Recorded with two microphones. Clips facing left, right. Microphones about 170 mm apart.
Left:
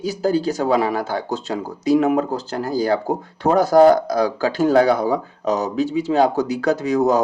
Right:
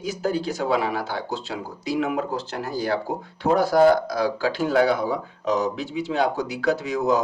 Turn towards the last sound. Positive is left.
turn(degrees=40)  # may be behind; listen again after turning